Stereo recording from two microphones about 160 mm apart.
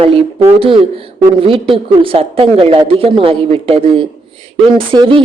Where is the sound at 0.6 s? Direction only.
35° right (ahead or behind).